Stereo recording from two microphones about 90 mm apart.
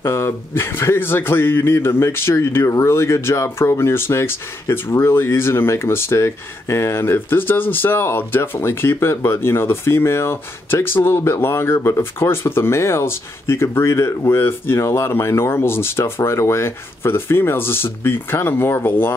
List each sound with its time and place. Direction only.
0.0 s speech: 30° left (ahead or behind)